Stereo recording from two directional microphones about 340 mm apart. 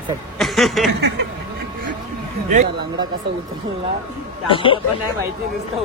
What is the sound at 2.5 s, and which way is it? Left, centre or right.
Speech, right.